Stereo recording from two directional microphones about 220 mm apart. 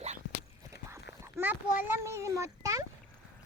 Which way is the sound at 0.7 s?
10° right (ahead or behind).